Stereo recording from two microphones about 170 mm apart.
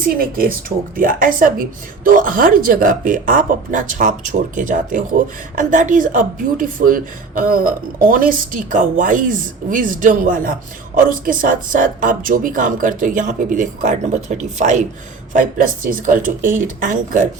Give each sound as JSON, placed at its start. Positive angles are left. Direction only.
{"t": 0.1, "sound": "speech", "side_deg": -60}